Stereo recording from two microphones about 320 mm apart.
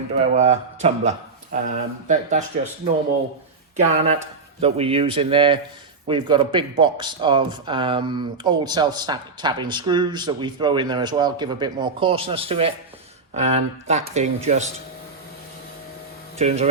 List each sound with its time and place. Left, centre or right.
0.3 s speech: right
3.8 s speech: centre
16.4 s speech: centre